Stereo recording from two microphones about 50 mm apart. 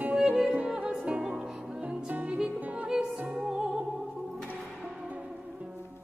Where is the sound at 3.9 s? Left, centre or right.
Centre.